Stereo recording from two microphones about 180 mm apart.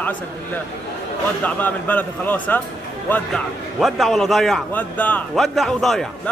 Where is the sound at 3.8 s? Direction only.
Centre (ahead or behind).